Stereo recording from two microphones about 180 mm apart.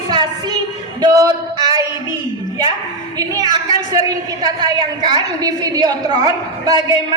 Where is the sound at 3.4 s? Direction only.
20° right (ahead or behind).